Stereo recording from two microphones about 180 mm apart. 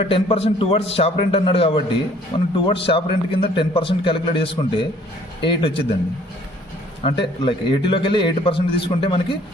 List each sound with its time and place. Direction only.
0.1 s a man's voice: 35° left (ahead or behind)
7.0 s a man's voice: 30° left (ahead or behind)